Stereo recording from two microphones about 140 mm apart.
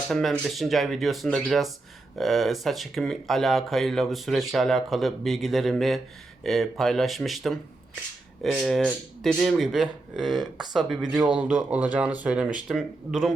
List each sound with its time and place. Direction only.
0.1 s speech: centre (ahead or behind)